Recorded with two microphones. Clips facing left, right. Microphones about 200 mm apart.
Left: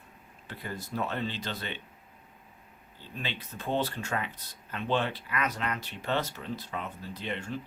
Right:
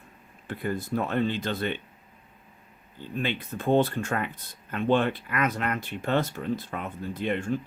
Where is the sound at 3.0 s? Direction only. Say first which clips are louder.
Right 8 dB; 50° right (ahead or behind).